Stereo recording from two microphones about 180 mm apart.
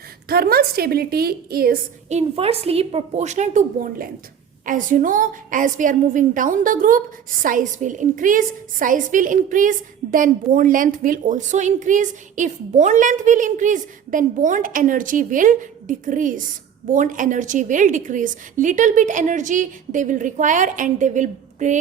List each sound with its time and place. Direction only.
0.3 s a woman's voice: 55° right (ahead or behind)
2.0 s a woman's voice: 35° right (ahead or behind)